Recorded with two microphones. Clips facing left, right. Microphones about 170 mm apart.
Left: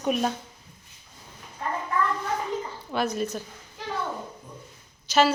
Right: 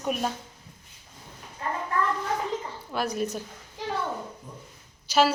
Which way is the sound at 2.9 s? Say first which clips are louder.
Left 1 dB; 10° right (ahead or behind).